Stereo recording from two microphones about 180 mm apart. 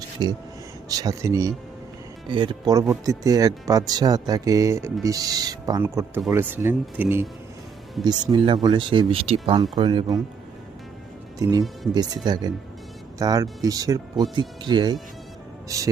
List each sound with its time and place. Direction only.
0.2 s speech: 25° right (ahead or behind)
8.0 s speech: 25° right (ahead or behind)
11.3 s speech: 20° right (ahead or behind)